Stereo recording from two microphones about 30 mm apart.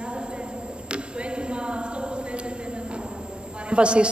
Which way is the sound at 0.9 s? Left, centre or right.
Right.